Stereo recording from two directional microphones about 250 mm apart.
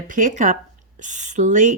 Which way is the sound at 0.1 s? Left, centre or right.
Right.